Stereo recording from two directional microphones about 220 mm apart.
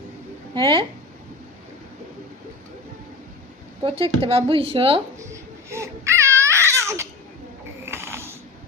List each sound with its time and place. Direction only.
0.5 s speech: 20° right (ahead or behind)
3.8 s speech: 25° right (ahead or behind)
5.2 s babbling: 15° right (ahead or behind)
7.9 s mechanisms: 10° right (ahead or behind)